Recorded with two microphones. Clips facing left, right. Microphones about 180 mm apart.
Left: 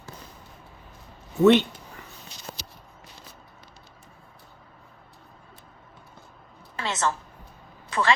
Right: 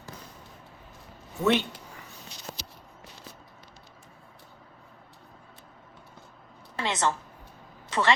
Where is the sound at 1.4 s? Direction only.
Centre (ahead or behind).